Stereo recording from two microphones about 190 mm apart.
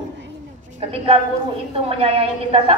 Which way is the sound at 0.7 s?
30° right (ahead or behind).